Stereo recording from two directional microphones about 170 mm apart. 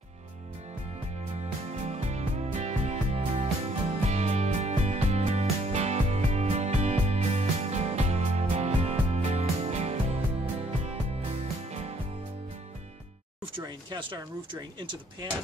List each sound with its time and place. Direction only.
1.9 s music: 40° right (ahead or behind)
13.7 s speech: 30° right (ahead or behind)